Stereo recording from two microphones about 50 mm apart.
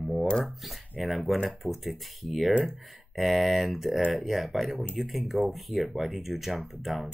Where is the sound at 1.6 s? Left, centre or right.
Centre.